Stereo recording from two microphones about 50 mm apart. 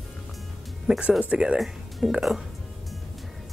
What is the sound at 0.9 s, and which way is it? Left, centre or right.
Speech, centre.